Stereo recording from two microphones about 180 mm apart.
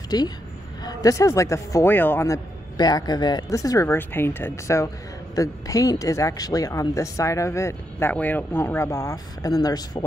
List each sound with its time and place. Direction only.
0.1 s a woman's voice: 20° left (ahead or behind)